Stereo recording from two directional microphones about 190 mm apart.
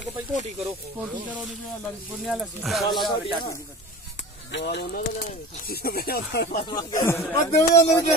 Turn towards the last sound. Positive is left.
turn(degrees=35)  # may be behind; listen again after turning